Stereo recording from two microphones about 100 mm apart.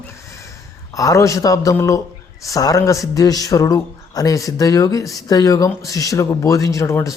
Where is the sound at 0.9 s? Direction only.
35° left (ahead or behind).